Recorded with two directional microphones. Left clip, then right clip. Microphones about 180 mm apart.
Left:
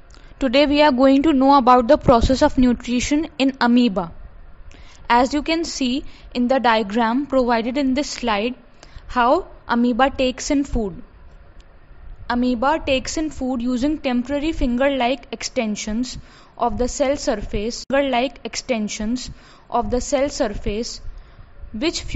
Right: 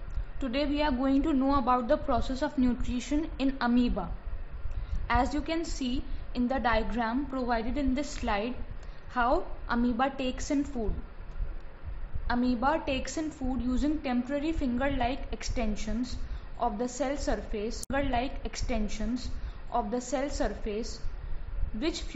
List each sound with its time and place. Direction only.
0.4 s a woman's voice: 55° left (ahead or behind)
12.3 s a woman's voice: 55° left (ahead or behind)